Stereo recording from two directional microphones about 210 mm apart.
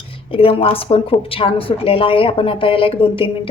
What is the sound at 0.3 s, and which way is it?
A woman's voice, 25° left (ahead or behind).